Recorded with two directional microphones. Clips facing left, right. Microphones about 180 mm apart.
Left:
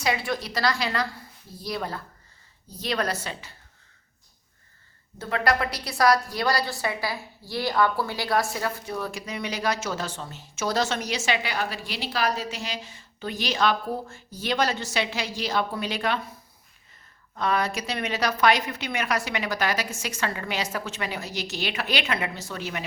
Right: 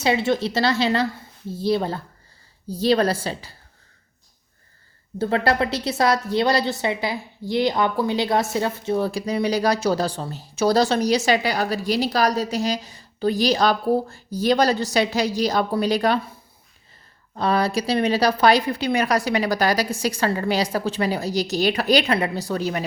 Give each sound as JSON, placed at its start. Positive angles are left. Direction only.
{"t": 0.0, "sound": "a woman's voice", "side_deg": -25}
{"t": 5.2, "sound": "a woman's voice", "side_deg": -30}
{"t": 17.3, "sound": "speech", "side_deg": -35}